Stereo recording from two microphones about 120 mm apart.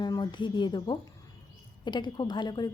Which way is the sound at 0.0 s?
40° left (ahead or behind).